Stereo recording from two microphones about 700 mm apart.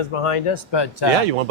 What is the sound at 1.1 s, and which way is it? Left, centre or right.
Speech, right.